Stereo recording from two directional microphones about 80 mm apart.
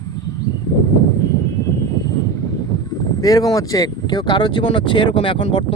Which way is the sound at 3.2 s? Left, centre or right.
Left.